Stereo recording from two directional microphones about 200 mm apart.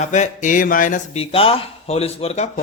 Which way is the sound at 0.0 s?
35° left (ahead or behind).